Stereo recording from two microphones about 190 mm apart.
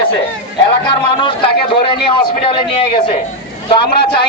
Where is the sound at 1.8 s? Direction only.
25° left (ahead or behind).